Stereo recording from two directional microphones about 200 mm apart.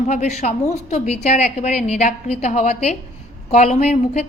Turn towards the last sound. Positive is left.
turn(degrees=35)  # may be behind; listen again after turning